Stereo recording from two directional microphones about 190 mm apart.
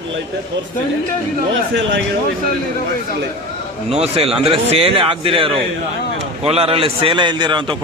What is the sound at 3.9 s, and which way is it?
A man's voice, 30° right (ahead or behind).